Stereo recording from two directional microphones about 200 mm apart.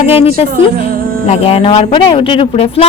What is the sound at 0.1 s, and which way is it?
Speech, 30° left (ahead or behind).